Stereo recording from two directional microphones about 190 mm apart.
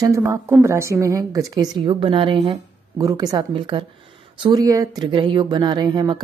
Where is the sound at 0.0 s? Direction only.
15° right (ahead or behind).